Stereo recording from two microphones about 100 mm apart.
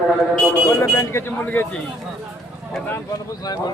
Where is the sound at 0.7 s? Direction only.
25° left (ahead or behind).